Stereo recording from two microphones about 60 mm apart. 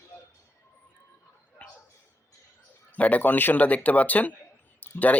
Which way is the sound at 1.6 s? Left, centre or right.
Left.